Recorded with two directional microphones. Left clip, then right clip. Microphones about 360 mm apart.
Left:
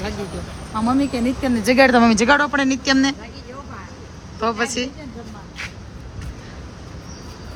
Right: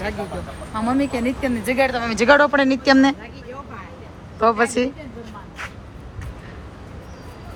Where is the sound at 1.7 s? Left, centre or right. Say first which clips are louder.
Left 7 dB; left.